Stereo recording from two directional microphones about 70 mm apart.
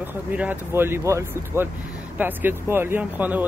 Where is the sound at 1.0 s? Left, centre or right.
Right.